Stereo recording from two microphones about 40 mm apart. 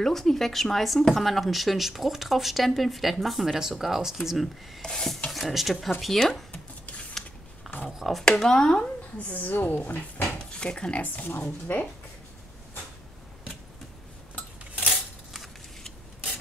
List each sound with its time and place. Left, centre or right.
0.0 s speech: centre
4.8 s speech: centre
5.3 s speech: centre
7.7 s a sound: centre
8.0 s speech: centre
8.5 s speech: centre
9.3 s speech: left
10.6 s speech: left
11.4 s speech: left
14.9 s scissors: centre